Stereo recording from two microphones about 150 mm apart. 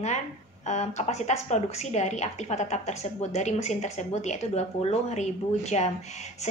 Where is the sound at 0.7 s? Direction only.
50° left (ahead or behind).